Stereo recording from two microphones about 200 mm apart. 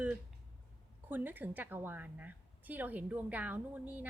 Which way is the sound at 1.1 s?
10° right (ahead or behind).